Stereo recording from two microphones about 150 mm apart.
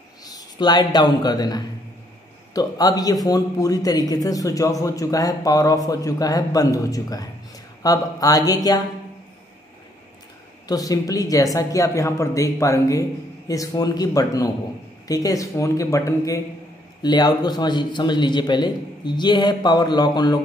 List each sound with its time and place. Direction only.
0.2 s a man's voice: 25° left (ahead or behind)
10.7 s a man's voice: 25° left (ahead or behind)